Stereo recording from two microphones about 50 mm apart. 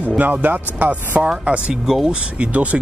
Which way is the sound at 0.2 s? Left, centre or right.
Right.